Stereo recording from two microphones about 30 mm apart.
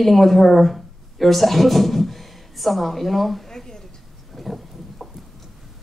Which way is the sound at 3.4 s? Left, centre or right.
Centre.